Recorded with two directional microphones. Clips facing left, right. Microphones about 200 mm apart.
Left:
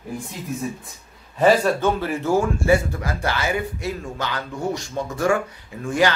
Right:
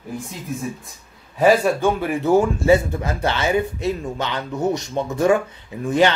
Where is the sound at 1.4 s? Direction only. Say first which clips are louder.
Right 1 dB; 10° right (ahead or behind).